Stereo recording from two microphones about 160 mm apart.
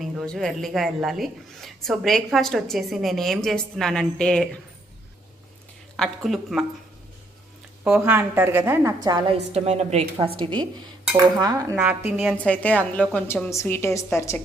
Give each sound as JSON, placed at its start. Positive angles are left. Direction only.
{"t": 0.0, "sound": "a woman's voice", "side_deg": 0}
{"t": 6.0, "sound": "a woman's voice", "side_deg": 0}
{"t": 7.9, "sound": "a woman's voice", "side_deg": -5}
{"t": 9.5, "sound": "a woman's voice", "side_deg": -40}
{"t": 10.3, "sound": "a woman's voice", "side_deg": -30}
{"t": 11.3, "sound": "cutlery", "side_deg": -20}
{"t": 11.9, "sound": "a woman's voice", "side_deg": -5}
{"t": 12.4, "sound": "a woman's voice", "side_deg": 10}